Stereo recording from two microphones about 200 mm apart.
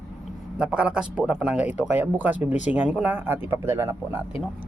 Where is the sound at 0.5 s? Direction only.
5° right (ahead or behind).